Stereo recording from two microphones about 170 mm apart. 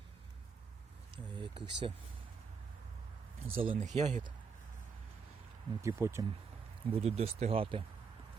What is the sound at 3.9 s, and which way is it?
Speech, 45° right (ahead or behind).